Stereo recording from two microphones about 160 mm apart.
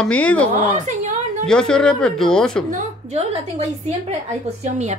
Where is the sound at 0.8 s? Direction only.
45° right (ahead or behind).